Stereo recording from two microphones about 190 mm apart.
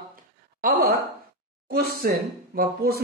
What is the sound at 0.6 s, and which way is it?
Speech, 50° right (ahead or behind).